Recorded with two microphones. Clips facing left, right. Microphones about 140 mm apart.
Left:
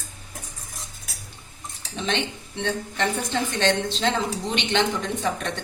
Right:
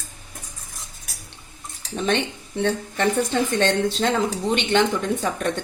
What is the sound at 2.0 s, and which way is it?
Speech, 50° right (ahead or behind).